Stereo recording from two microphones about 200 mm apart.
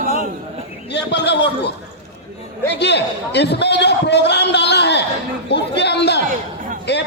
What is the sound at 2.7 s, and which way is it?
A man's voice, 60° left (ahead or behind).